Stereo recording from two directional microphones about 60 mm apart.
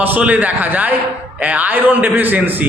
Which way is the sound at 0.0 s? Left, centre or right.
Right.